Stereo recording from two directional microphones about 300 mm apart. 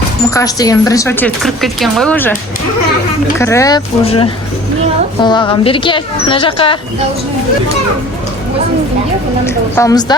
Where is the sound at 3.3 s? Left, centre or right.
Centre.